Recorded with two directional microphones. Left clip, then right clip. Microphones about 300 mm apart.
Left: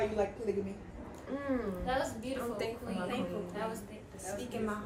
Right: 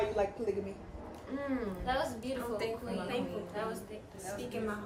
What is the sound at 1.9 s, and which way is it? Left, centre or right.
Speech, centre.